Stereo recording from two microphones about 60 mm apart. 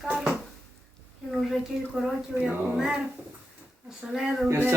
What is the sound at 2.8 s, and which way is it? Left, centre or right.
Speech, centre.